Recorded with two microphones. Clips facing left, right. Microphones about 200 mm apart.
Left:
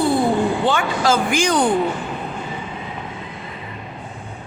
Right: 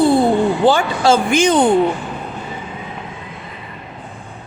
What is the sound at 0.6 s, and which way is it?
Speech, 30° right (ahead or behind).